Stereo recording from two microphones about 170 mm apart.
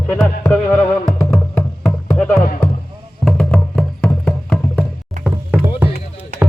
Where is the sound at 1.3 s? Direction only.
5° left (ahead or behind).